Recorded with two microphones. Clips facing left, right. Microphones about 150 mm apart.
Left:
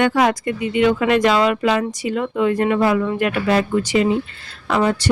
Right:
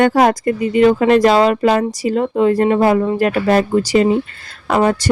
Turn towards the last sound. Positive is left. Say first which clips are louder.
# right 4 dB
turn(degrees=-45)  # may be behind; listen again after turning